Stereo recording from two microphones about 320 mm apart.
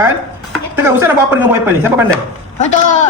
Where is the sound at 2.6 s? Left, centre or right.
Left.